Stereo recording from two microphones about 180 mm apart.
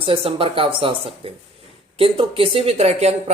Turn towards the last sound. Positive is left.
turn(degrees=-35)  # may be behind; listen again after turning